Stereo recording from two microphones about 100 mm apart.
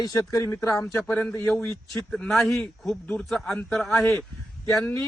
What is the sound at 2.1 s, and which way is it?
Speech, 5° left (ahead or behind).